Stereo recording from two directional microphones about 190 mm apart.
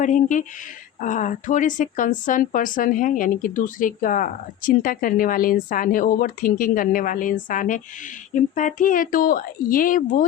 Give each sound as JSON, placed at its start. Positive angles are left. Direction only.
{"t": 0.0, "sound": "a woman's voice", "side_deg": 40}